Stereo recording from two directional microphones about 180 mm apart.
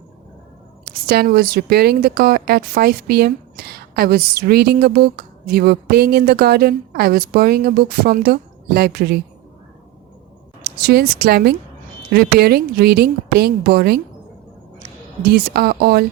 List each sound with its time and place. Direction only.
0.9 s a woman's voice: 60° right (ahead or behind)
10.6 s a woman's voice: 60° right (ahead or behind)
15.2 s a woman's voice: 60° right (ahead or behind)